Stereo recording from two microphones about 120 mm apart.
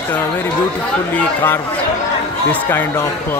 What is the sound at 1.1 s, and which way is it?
Speech, 20° left (ahead or behind).